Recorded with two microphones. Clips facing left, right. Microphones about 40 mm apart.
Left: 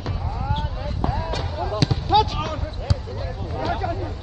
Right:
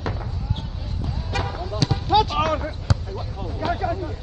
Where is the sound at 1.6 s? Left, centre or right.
Centre.